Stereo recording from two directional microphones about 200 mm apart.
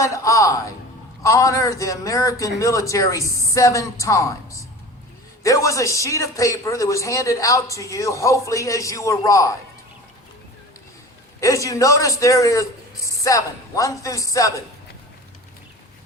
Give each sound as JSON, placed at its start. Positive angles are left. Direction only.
{"t": 0.0, "sound": "a sound", "side_deg": 15}
{"t": 1.2, "sound": "speech", "side_deg": 15}
{"t": 5.4, "sound": "speech", "side_deg": 15}
{"t": 11.3, "sound": "speech", "side_deg": 15}